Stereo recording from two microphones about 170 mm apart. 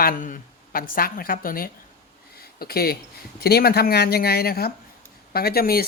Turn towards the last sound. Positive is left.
turn(degrees=65)  # may be behind; listen again after turning